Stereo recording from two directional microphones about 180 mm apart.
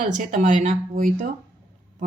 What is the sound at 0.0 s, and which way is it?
Speech, 45° right (ahead or behind).